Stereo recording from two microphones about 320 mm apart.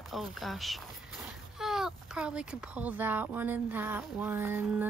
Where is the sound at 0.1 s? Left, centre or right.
Centre.